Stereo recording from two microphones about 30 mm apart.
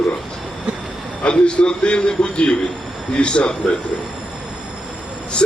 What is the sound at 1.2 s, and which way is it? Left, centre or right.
A man's voice, left.